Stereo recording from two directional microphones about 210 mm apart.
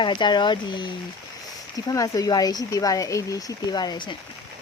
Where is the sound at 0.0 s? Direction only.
20° left (ahead or behind).